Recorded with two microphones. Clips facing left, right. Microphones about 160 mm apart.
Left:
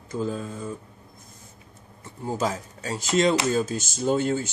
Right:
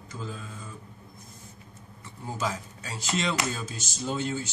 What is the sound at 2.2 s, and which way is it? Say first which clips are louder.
Speech: left 5 dB; 45° left (ahead or behind).